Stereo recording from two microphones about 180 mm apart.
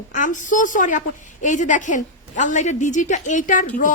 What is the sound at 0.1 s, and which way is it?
A woman's voice, 45° left (ahead or behind).